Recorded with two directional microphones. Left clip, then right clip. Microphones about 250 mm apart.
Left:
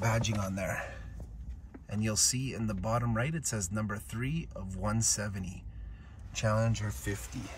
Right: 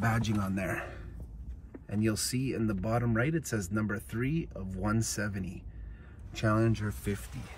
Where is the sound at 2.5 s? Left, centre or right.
Right.